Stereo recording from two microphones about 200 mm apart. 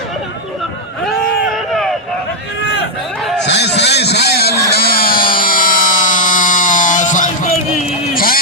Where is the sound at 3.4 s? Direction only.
60° left (ahead or behind).